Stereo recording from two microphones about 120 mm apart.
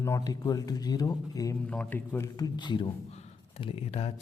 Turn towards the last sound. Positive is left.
turn(degrees=55)  # may be behind; listen again after turning